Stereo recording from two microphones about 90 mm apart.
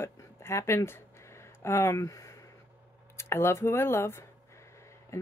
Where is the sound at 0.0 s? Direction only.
30° left (ahead or behind).